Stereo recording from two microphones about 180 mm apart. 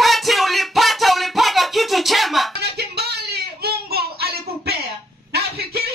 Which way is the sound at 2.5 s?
65° right (ahead or behind).